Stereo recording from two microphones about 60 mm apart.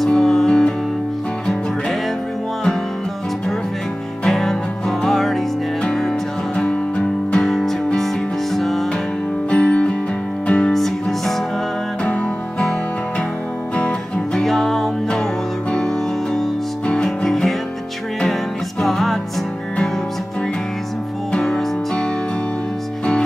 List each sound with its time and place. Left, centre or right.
0.0 s music: centre
4.2 s music: centre
7.4 s music: centre
9.5 s music: left
10.7 s music: centre
12.0 s music: centre
13.7 s music: centre
14.4 s music: centre
16.8 s music: centre
17.3 s music: centre
18.8 s music: centre
21.3 s music: centre